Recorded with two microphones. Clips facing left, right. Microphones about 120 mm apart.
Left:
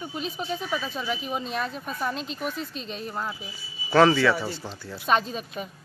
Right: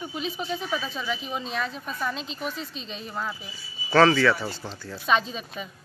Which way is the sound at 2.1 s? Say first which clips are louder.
Left 2 dB; 55° left (ahead or behind).